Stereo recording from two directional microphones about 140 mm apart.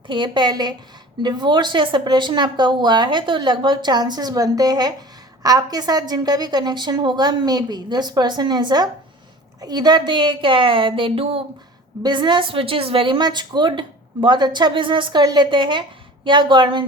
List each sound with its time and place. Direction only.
0.1 s a woman's voice: 35° right (ahead or behind)